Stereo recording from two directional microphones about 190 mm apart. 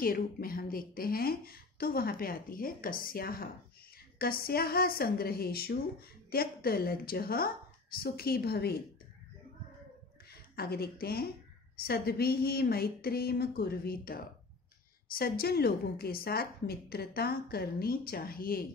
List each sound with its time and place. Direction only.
0.0 s a woman's voice: 50° left (ahead or behind)
10.5 s a woman's voice: 55° left (ahead or behind)